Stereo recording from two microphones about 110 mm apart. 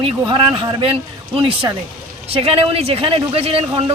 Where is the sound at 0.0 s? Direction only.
55° right (ahead or behind).